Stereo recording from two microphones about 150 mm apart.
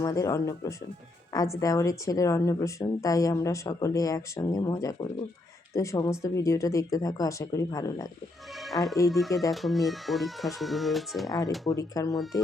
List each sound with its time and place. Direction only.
0.0 s a woman's voice: 20° left (ahead or behind)
8.5 s speech: centre (ahead or behind)
11.3 s a woman's voice: 25° left (ahead or behind)